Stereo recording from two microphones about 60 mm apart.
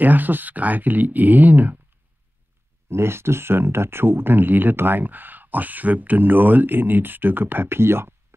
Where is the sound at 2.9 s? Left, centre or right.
Right.